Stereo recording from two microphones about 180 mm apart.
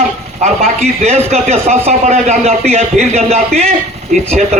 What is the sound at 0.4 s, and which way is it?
A man's voice, 40° right (ahead or behind).